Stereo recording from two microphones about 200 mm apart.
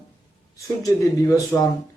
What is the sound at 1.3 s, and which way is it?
Speech, 20° left (ahead or behind).